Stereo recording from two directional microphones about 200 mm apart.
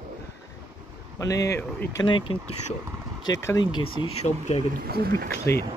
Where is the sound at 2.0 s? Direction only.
25° left (ahead or behind).